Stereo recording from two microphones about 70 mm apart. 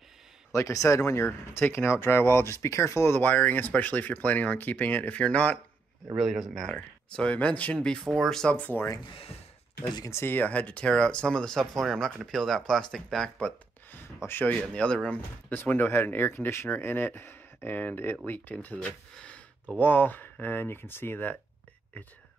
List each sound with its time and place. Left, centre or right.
0.5 s speech: left
3.2 s speech: left
6.1 s speech: centre
6.6 s speech: centre
8.5 s speech: left
10.2 s speech: left; by 13.5 s centre
13.9 s a sound: left
14.7 s speech: centre
15.5 s speech: left
19.8 s speech: left